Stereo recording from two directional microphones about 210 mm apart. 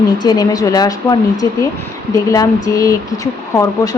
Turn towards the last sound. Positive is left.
turn(degrees=15)  # may be behind; listen again after turning